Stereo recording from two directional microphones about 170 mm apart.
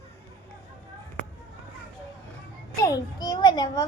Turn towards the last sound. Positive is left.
turn(degrees=20)  # may be behind; listen again after turning